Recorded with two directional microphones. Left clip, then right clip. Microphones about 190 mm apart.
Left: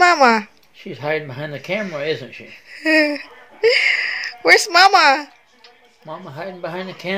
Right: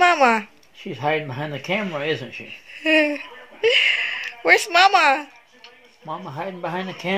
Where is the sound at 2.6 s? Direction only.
15° left (ahead or behind).